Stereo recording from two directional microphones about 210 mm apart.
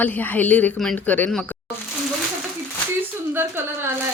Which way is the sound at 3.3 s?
10° right (ahead or behind).